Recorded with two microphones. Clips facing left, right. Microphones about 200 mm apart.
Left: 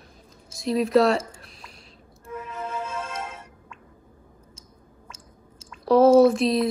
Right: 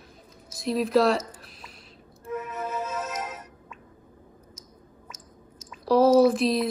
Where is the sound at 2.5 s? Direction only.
10° right (ahead or behind).